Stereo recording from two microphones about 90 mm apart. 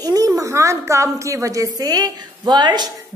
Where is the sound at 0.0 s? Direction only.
40° right (ahead or behind).